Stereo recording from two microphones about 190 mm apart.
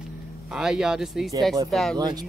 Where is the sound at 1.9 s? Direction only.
20° right (ahead or behind).